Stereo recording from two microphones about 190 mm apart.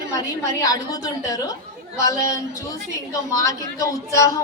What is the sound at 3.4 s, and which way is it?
A woman's voice, 15° left (ahead or behind).